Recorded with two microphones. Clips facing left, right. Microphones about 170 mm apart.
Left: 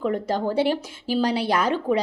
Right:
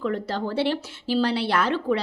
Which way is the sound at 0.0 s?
15° left (ahead or behind).